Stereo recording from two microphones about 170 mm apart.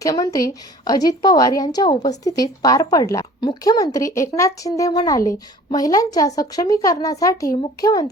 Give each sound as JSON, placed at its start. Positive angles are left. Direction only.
{"t": 0.0, "sound": "a woman's voice", "side_deg": 20}